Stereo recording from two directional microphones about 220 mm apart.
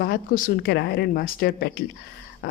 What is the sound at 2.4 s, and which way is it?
Dog, 45° left (ahead or behind).